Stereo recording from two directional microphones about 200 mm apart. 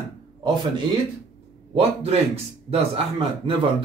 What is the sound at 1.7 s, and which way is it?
A man's voice, 30° right (ahead or behind).